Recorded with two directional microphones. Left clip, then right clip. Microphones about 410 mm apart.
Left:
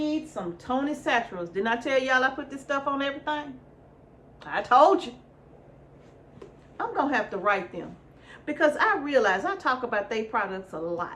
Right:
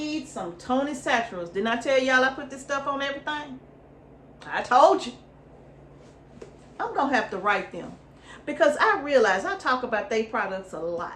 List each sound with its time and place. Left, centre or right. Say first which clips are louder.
0.3 s a woman's voice: right 2 dB; centre
4.4 s a woman's voice: right 1 dB; centre
6.7 s a woman's voice: right 2 dB; centre